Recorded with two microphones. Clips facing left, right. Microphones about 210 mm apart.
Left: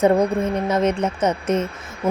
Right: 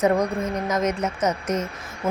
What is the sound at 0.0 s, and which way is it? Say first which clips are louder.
A woman's voice: left 4 dB; 30° left (ahead or behind).